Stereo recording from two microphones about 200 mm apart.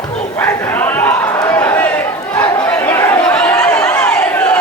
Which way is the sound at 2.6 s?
10° left (ahead or behind).